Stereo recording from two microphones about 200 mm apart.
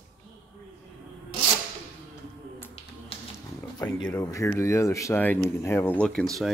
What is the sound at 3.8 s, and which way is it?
Speech, 20° left (ahead or behind).